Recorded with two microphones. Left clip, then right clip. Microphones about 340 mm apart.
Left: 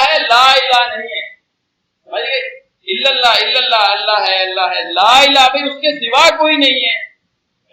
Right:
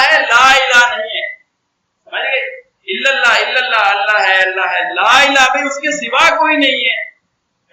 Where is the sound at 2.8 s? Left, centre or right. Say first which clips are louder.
Even; centre.